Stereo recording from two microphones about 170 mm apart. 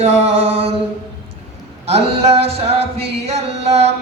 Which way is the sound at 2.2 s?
35° right (ahead or behind).